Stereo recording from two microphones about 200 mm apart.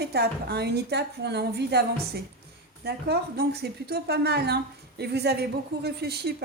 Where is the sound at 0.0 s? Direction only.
55° right (ahead or behind).